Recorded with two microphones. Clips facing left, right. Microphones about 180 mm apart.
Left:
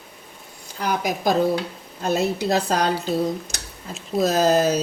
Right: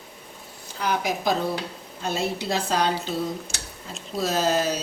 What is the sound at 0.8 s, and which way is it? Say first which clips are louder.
Speech: left 2 dB; 45° left (ahead or behind).